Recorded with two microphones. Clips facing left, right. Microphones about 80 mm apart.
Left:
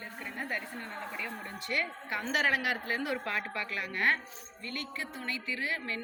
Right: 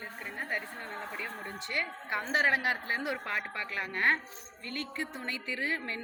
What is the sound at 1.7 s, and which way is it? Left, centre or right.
A woman's voice, right.